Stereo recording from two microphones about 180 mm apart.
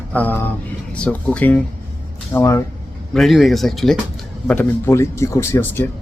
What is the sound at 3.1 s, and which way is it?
Speech, centre (ahead or behind).